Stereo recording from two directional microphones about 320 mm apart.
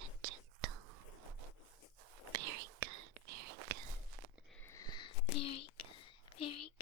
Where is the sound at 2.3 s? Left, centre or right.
Right.